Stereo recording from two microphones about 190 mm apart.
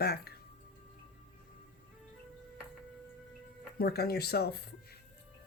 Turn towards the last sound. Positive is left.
turn(degrees=55)  # may be behind; listen again after turning